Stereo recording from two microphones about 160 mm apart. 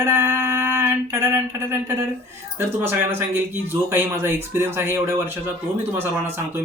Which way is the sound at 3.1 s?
15° right (ahead or behind).